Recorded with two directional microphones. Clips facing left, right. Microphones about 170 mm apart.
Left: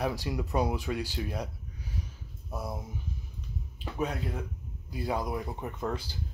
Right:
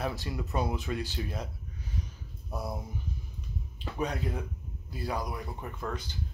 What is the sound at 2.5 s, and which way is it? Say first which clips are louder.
Speech: right 1 dB; centre (ahead or behind).